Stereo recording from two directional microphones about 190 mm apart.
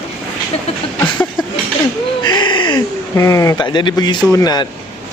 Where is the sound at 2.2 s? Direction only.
25° left (ahead or behind).